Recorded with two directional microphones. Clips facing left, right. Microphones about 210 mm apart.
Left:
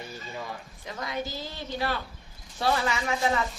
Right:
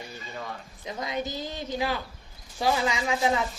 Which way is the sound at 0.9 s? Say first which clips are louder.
Right 2 dB; 20° right (ahead or behind).